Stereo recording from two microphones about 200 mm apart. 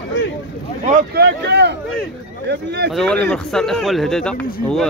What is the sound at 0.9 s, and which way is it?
Speech, 55° right (ahead or behind).